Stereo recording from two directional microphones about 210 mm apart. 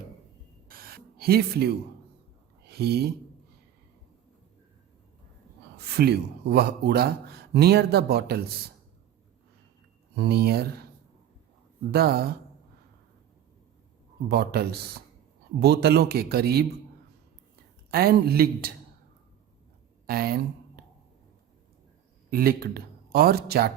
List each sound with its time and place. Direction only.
0.7 s a sound: 45° right (ahead or behind)
2.6 s speech: 50° right (ahead or behind)
5.8 s speech: 50° right (ahead or behind)
10.2 s speech: 50° right (ahead or behind)
11.9 s speech: 45° right (ahead or behind)
14.3 s speech: 50° right (ahead or behind)
17.9 s speech: 45° right (ahead or behind)
20.1 s speech: 45° right (ahead or behind)
22.3 s a man's voice: 45° right (ahead or behind)